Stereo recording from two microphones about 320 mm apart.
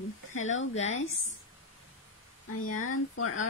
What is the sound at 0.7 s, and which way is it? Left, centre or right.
Speech, left.